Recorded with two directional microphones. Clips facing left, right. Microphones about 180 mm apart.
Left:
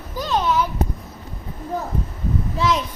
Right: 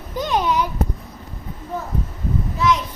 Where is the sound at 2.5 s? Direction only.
30° left (ahead or behind).